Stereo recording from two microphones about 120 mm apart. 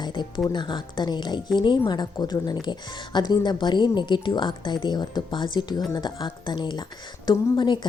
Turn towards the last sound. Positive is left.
turn(degrees=40)  # may be behind; listen again after turning